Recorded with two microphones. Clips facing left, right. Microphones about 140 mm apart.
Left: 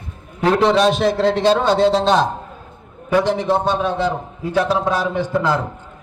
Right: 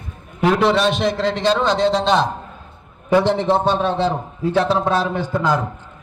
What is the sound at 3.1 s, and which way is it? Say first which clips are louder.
Speech: right 1 dB; 20° right (ahead or behind).